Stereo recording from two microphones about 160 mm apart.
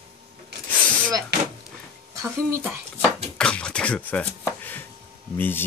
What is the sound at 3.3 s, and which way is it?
Speech, 5° left (ahead or behind).